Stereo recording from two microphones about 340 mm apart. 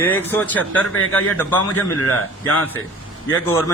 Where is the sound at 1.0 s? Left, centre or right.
Left.